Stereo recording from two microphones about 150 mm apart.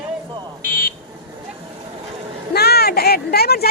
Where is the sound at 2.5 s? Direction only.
90° left.